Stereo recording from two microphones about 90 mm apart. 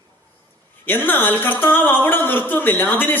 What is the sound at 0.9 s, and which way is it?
A woman's voice, 20° left (ahead or behind).